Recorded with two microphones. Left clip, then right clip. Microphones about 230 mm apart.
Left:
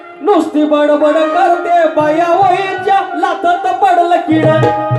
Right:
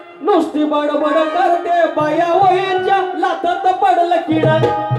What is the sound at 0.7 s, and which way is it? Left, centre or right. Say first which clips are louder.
Music: left 5 dB; left.